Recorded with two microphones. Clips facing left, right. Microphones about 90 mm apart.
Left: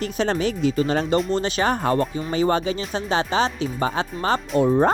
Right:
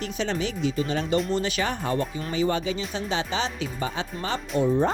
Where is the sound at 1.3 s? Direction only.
40° left (ahead or behind).